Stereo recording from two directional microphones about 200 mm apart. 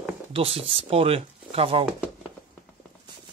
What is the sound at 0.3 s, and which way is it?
Speech, 30° right (ahead or behind).